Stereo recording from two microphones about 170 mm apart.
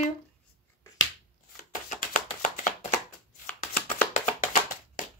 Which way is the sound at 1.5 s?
50° left (ahead or behind).